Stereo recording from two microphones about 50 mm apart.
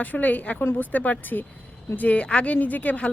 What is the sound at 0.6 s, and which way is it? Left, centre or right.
Speech, left.